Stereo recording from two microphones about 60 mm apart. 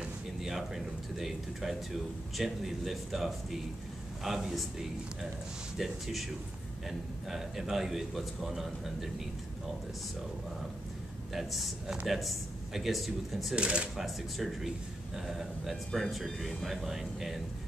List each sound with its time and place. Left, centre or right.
0.4 s speech: centre
11.3 s speech: centre
13.6 s speech: centre
13.9 s speech: centre